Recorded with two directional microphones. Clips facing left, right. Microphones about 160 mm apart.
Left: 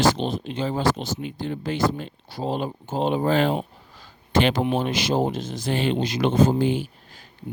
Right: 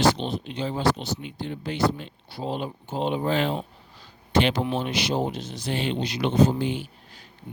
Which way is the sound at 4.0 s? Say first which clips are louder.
Left 1 dB; 45° left (ahead or behind).